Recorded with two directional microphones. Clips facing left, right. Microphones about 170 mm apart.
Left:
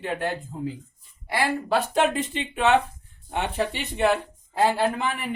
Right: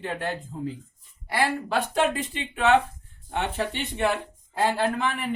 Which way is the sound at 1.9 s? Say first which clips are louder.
Left 2 dB; 20° left (ahead or behind).